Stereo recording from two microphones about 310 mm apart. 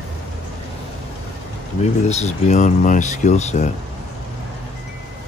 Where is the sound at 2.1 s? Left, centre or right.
Left.